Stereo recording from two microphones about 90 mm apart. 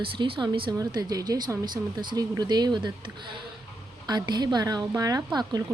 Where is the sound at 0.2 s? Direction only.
60° right (ahead or behind).